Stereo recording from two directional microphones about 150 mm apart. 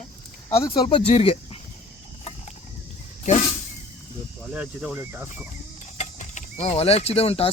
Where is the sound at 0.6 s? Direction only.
30° left (ahead or behind).